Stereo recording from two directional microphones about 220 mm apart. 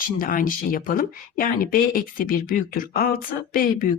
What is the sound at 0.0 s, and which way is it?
Speech, 40° left (ahead or behind).